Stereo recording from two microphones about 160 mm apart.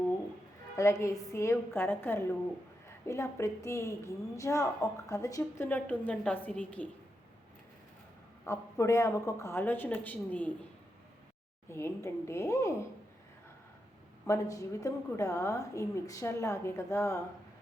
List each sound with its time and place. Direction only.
0.8 s a woman's voice: 20° left (ahead or behind)
8.4 s a woman's voice: 20° left (ahead or behind)
11.7 s a woman's voice: 15° left (ahead or behind)
14.3 s a woman's voice: 20° left (ahead or behind)